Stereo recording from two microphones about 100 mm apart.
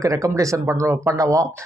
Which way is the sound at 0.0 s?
30° right (ahead or behind).